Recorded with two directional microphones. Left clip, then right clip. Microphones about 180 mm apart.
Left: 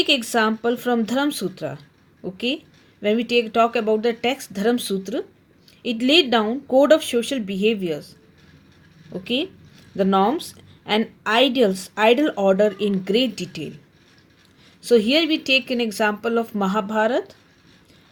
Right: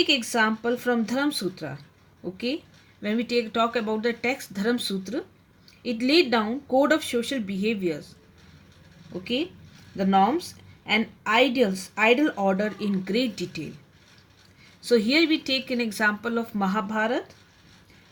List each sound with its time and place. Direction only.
0.0 s a woman's voice: 40° left (ahead or behind)
3.0 s a woman's voice: 30° left (ahead or behind)
9.2 s a woman's voice: 40° left (ahead or behind)
14.8 s a woman's voice: 35° left (ahead or behind)